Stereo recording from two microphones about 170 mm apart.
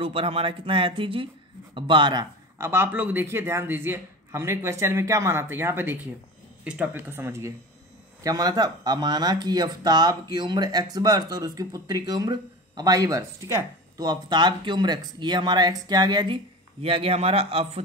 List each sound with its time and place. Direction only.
0.0 s speech: 35° right (ahead or behind)
2.6 s speech: 15° right (ahead or behind); by 17.8 s 35° right (ahead or behind)